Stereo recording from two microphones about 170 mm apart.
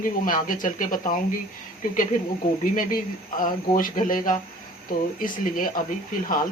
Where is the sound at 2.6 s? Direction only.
55° left (ahead or behind).